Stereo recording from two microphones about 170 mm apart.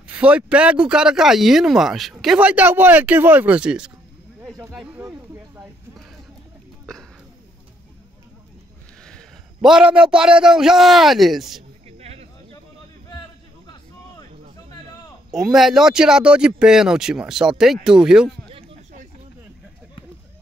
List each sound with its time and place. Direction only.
0.0 s speech: 5° right (ahead or behind)
5.0 s snake: 15° right (ahead or behind)
6.9 s a sound: 5° left (ahead or behind)
9.0 s a man's voice: centre (ahead or behind)
12.0 s a sound: 35° right (ahead or behind)
15.3 s speech: centre (ahead or behind)
18.5 s chop: 35° right (ahead or behind)